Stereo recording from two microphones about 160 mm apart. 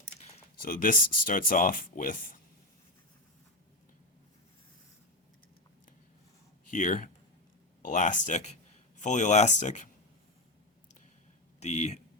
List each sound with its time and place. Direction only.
0.6 s speech: 60° left (ahead or behind)
6.7 s speech: 55° left (ahead or behind)
11.6 s speech: 45° left (ahead or behind)